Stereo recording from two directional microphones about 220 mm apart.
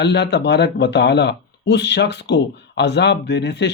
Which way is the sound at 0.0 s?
50° left (ahead or behind).